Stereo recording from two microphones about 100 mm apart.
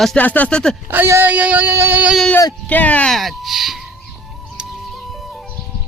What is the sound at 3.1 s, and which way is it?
Music, centre (ahead or behind).